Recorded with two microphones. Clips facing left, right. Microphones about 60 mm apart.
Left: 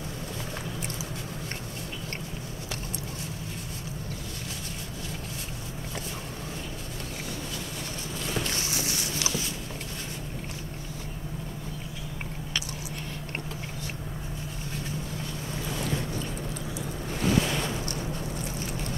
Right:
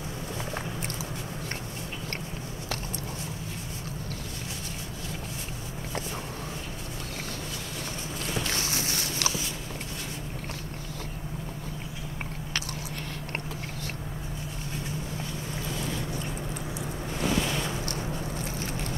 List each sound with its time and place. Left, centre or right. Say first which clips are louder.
8.5 s boat: right 1 dB; right